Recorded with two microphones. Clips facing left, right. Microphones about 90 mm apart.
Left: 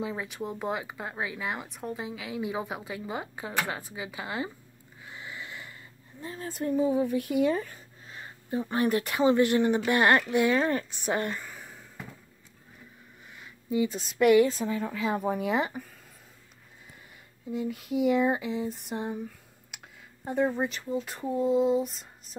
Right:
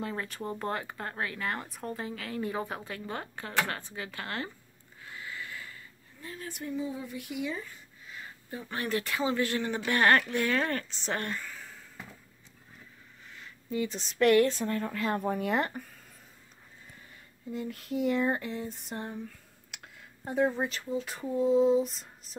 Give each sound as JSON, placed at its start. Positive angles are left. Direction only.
{"t": 0.0, "sound": "speech", "side_deg": 5}
{"t": 5.0, "sound": "a sound", "side_deg": 20}
{"t": 6.2, "sound": "speech", "side_deg": 30}
{"t": 6.6, "sound": "a woman's voice", "side_deg": 55}
{"t": 8.1, "sound": "a sound", "side_deg": 25}
{"t": 8.8, "sound": "speech", "side_deg": 20}
{"t": 13.3, "sound": "speech", "side_deg": 10}
{"t": 17.5, "sound": "speech", "side_deg": 5}